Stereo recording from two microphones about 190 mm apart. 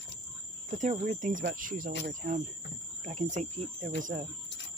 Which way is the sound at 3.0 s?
40° right (ahead or behind).